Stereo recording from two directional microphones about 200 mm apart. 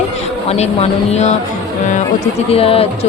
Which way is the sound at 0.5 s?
35° left (ahead or behind).